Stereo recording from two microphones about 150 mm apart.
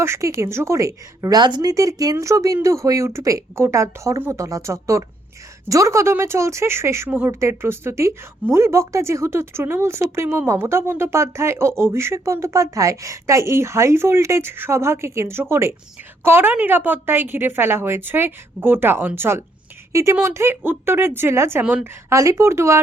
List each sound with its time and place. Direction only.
0.0 s a woman's voice: 15° right (ahead or behind)
22.1 s a woman's voice: 20° right (ahead or behind)